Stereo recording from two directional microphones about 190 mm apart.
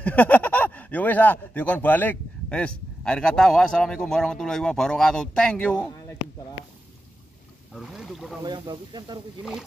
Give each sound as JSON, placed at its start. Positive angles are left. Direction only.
{"t": 0.0, "sound": "speech", "side_deg": 10}
{"t": 7.7, "sound": "speech", "side_deg": 0}
{"t": 8.4, "sound": "speech", "side_deg": -25}
{"t": 9.4, "sound": "speech", "side_deg": -5}